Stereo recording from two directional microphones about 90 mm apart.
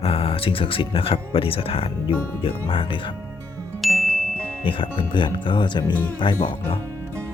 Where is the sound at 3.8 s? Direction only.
Centre (ahead or behind).